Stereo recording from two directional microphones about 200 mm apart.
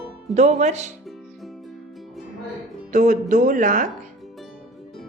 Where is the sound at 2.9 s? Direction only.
40° right (ahead or behind).